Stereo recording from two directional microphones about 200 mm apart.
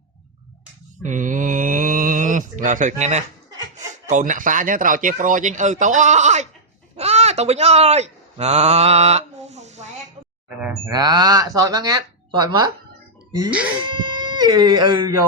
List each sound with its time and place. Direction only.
1.0 s mantra: 40° right (ahead or behind)
3.8 s speech: 40° right (ahead or behind)
6.9 s a sound: 30° right (ahead or behind)
10.8 s speech: 20° right (ahead or behind)
13.8 s speech: 20° right (ahead or behind)